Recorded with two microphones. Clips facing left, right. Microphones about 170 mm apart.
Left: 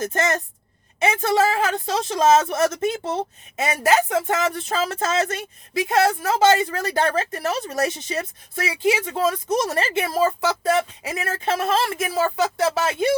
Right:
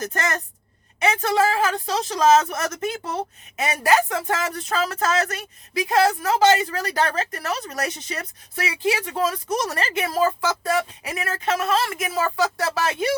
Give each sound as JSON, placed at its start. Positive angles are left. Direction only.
{"t": 0.0, "sound": "speech", "side_deg": 25}